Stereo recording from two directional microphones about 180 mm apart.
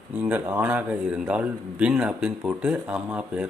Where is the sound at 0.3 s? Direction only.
10° right (ahead or behind).